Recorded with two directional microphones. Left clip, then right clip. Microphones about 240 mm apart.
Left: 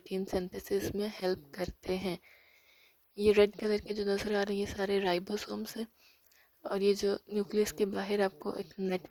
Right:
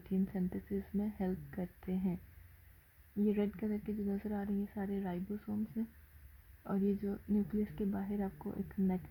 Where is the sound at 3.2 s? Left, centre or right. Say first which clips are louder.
Left 12 dB; left.